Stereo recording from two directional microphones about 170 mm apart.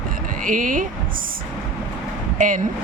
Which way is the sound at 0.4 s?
50° right (ahead or behind).